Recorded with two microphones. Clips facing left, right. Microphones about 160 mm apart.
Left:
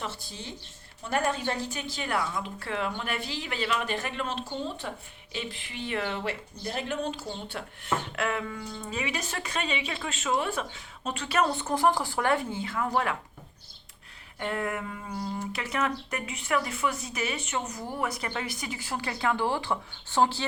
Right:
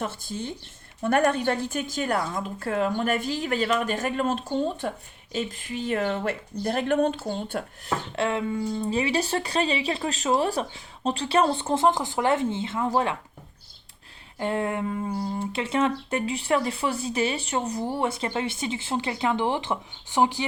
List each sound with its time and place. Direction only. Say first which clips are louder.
0.0 s a woman's voice: right 7 dB; 50° right (ahead or behind)
8.1 s speech: right 5 dB; 25° right (ahead or behind)
14.3 s speech: right 5 dB; 25° right (ahead or behind)